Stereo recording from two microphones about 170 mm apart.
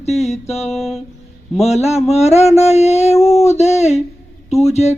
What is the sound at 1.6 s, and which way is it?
Music, 40° left (ahead or behind).